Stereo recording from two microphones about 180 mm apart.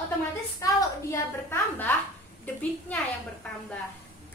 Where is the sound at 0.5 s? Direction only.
15° left (ahead or behind).